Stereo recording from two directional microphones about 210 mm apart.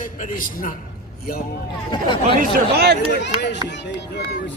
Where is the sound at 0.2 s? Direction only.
40° left (ahead or behind).